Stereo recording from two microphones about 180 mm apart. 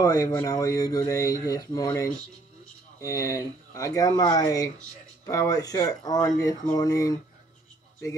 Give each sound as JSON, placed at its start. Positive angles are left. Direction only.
{"t": 0.0, "sound": "speech", "side_deg": 20}